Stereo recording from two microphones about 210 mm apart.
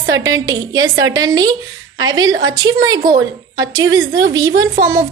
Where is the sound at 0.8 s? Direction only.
70° right (ahead or behind).